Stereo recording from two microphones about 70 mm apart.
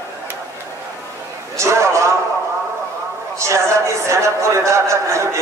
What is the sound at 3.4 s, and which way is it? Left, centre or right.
A man's voice, right.